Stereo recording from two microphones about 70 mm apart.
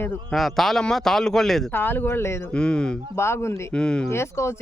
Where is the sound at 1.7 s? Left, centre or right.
Left.